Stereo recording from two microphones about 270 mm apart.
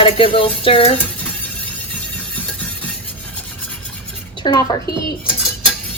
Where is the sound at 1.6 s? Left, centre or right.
Centre.